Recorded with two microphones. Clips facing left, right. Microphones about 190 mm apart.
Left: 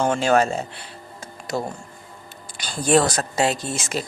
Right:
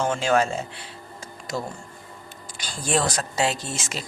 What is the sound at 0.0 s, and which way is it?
Speech, 50° left (ahead or behind).